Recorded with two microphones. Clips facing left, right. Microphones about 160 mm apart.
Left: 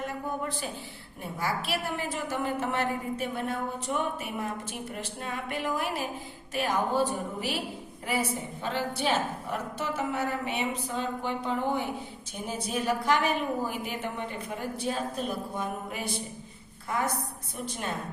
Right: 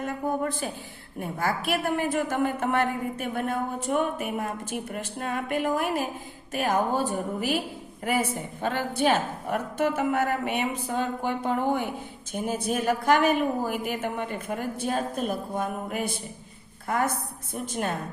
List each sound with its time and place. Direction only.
0.0 s a sound: 50° right (ahead or behind)
1.2 s a woman's voice: 50° right (ahead or behind)
8.6 s a woman's voice: 50° right (ahead or behind)